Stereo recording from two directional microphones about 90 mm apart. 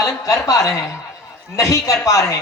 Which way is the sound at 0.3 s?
40° left (ahead or behind).